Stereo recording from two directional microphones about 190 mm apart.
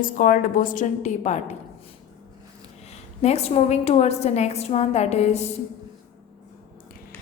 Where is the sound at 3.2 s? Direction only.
35° left (ahead or behind).